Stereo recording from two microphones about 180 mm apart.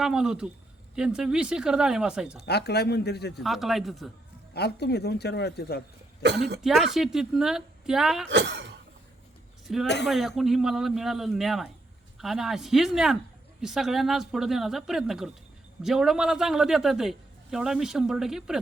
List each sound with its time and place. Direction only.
0.0 s a man's voice: 5° right (ahead or behind)
2.4 s speech: 65° left (ahead or behind)
3.4 s a man's voice: centre (ahead or behind)
4.5 s speech: 65° left (ahead or behind)
6.2 s speech: 70° right (ahead or behind)
6.6 s a man's voice: centre (ahead or behind)
8.3 s speech: 75° right (ahead or behind)
9.8 s speech: 70° left (ahead or behind)
10.1 s a man's voice: centre (ahead or behind)